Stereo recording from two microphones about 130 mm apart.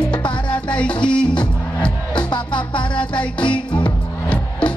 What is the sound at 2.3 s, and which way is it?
Music, 40° left (ahead or behind).